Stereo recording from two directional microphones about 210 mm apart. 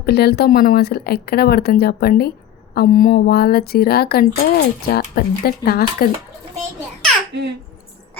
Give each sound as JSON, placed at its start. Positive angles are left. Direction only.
{"t": 0.0, "sound": "speech", "side_deg": 50}